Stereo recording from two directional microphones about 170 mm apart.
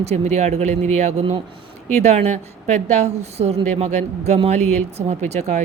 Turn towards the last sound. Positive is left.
turn(degrees=-40)  # may be behind; listen again after turning